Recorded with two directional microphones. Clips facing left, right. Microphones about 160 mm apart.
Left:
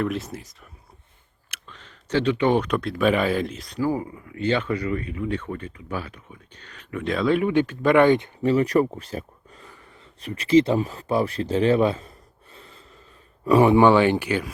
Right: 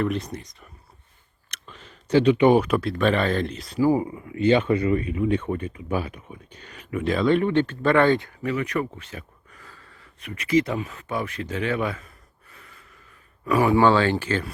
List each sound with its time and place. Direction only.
0.0 s speech: 5° left (ahead or behind)
1.6 s speech: 10° right (ahead or behind)
3.8 s speech: 20° right (ahead or behind); by 10.1 s 20° left (ahead or behind)
10.2 s speech: 30° left (ahead or behind); by 14.5 s 15° left (ahead or behind)